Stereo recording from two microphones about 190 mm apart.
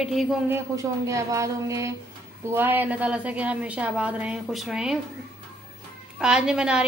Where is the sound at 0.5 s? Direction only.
15° right (ahead or behind).